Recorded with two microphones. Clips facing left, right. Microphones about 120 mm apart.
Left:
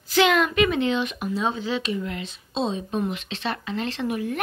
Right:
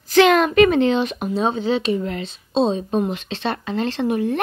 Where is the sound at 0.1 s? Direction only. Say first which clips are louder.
Right 6 dB; 45° right (ahead or behind).